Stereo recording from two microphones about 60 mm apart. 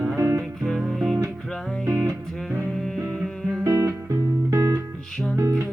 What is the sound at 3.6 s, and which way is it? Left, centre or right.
Music, right.